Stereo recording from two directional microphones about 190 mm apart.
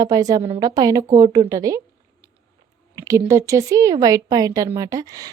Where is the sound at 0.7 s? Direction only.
20° right (ahead or behind).